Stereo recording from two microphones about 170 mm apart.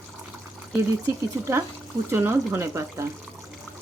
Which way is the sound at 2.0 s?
15° right (ahead or behind).